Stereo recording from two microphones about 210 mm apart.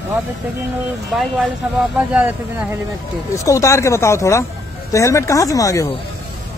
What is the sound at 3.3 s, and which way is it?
Speech, 15° left (ahead or behind).